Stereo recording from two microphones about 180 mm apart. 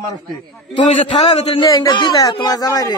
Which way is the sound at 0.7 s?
25° left (ahead or behind).